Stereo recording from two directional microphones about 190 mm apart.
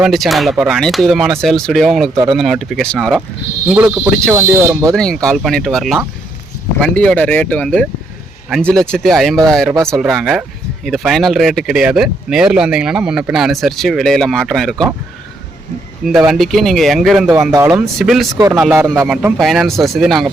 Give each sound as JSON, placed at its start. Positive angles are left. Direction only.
{"t": 0.0, "sound": "speech", "side_deg": 0}
{"t": 2.1, "sound": "speech", "side_deg": -20}
{"t": 2.4, "sound": "speech", "side_deg": 0}
{"t": 4.9, "sound": "speech", "side_deg": 5}
{"t": 16.0, "sound": "speech", "side_deg": 0}
{"t": 17.5, "sound": "speech", "side_deg": -15}
{"t": 17.7, "sound": "speech", "side_deg": -5}